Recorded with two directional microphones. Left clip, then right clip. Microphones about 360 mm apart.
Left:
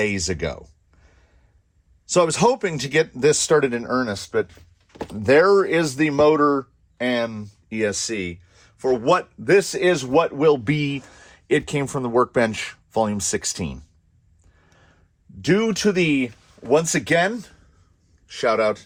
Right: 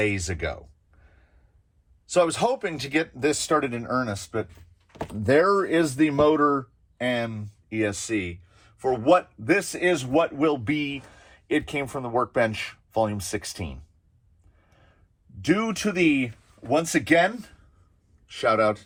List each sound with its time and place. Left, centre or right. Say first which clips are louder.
0.1 s speech: left 4 dB; centre
2.0 s speech: left 4 dB; centre
4.9 s speech: left 5 dB; centre
7.0 s speech: left 4 dB; left
15.4 s speech: left 4 dB; left